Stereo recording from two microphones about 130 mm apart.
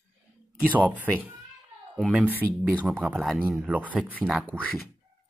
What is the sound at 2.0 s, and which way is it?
Speech, 5° right (ahead or behind).